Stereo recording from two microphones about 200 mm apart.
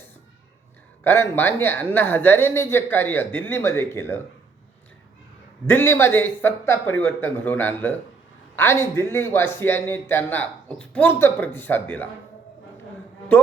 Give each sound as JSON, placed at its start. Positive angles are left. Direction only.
{"t": 1.0, "sound": "a man's voice", "side_deg": 10}
{"t": 5.6, "sound": "a man's voice", "side_deg": 10}